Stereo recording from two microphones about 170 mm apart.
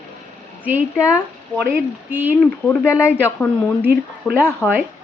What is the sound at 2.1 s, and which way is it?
Speech, 10° right (ahead or behind).